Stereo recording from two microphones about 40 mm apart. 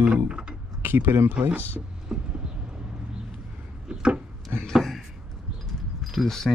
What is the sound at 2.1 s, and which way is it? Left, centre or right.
Vehicle, centre.